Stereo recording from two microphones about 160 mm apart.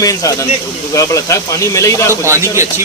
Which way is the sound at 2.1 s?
15° right (ahead or behind).